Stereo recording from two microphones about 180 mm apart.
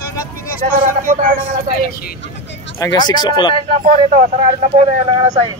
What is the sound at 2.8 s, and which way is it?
Speech, 25° left (ahead or behind).